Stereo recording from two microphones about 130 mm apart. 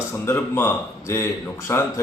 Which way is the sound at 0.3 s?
15° left (ahead or behind).